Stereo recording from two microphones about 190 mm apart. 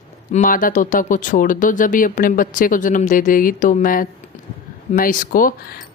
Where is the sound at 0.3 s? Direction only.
45° left (ahead or behind).